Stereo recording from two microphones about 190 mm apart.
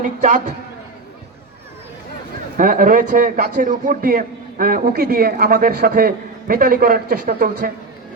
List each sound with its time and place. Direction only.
0.2 s a man's voice: 40° right (ahead or behind)
2.6 s a man's voice: 45° right (ahead or behind)